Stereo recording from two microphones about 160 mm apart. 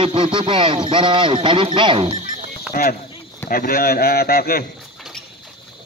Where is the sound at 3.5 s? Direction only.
65° left (ahead or behind).